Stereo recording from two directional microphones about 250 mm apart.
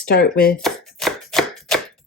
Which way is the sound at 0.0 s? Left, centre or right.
Left.